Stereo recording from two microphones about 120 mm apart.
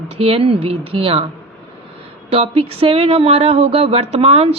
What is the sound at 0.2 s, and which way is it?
A woman's voice, 50° right (ahead or behind).